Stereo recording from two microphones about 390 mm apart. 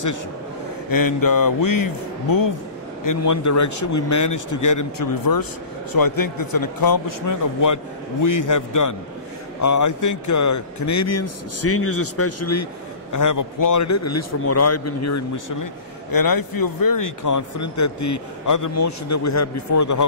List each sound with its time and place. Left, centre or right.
0.8 s a man's voice: left
13.1 s a man's voice: left